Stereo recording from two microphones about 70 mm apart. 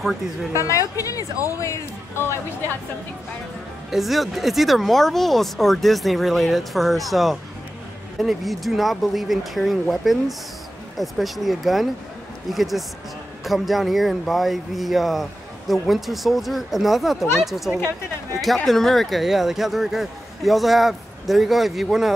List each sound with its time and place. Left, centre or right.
0.0 s a man's voice: centre
0.6 s speech: left
3.9 s a man's voice: centre